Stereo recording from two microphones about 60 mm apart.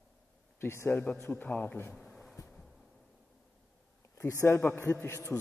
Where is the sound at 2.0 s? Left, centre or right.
Centre.